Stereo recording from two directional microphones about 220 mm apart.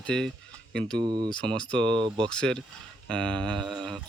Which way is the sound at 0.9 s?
20° right (ahead or behind).